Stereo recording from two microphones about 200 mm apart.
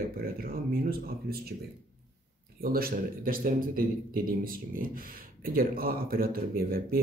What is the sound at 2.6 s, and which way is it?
A man's voice, 45° right (ahead or behind).